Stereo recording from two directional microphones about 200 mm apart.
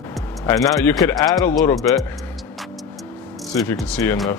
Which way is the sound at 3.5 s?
15° left (ahead or behind).